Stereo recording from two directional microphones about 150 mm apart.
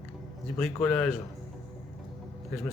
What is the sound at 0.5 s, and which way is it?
Speech, 5° left (ahead or behind).